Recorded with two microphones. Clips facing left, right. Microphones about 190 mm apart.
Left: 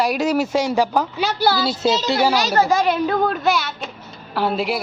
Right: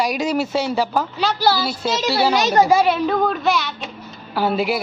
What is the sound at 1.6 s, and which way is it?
Speech, 25° left (ahead or behind).